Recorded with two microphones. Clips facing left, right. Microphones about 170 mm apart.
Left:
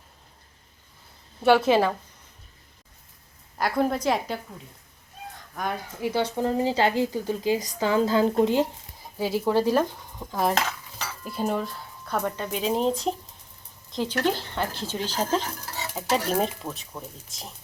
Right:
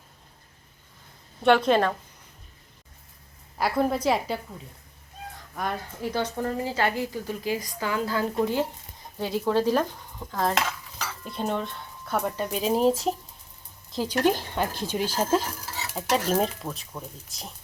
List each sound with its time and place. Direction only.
1.5 s speech: 5° left (ahead or behind)
3.6 s speech: 5° right (ahead or behind)
5.5 s speech: centre (ahead or behind)
6.0 s a woman's voice: 15° left (ahead or behind)
9.1 s speech: 5° left (ahead or behind)
10.5 s dishes: 5° left (ahead or behind)
13.9 s speech: 10° right (ahead or behind)
16.0 s speech: 5° left (ahead or behind)